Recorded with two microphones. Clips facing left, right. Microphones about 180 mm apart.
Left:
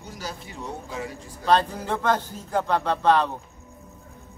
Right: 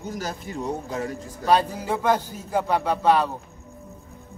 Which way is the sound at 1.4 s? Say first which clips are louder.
Right 1 dB; 10° right (ahead or behind).